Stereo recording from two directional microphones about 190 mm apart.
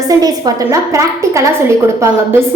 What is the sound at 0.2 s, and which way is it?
A woman's voice, 20° right (ahead or behind).